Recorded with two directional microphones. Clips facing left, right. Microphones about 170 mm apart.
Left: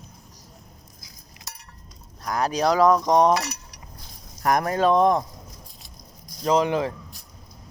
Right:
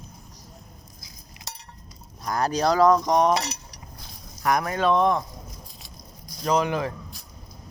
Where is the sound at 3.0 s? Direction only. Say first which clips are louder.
Left 2 dB; 25° left (ahead or behind).